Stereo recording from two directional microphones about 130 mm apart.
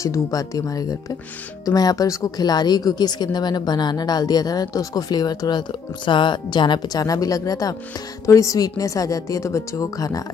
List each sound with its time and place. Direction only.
0.0 s a woman's voice: 25° left (ahead or behind)